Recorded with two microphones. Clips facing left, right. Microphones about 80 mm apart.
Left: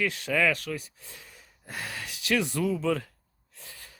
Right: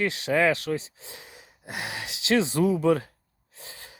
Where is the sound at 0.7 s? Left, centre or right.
Right.